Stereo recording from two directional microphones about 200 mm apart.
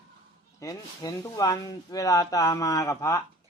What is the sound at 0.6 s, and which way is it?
Speech, 15° left (ahead or behind).